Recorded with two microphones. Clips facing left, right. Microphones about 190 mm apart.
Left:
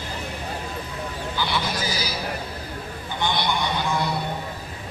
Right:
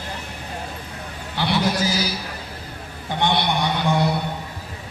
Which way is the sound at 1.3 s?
65° right (ahead or behind).